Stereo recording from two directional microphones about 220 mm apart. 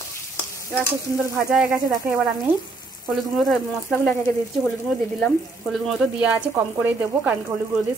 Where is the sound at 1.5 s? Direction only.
Centre (ahead or behind).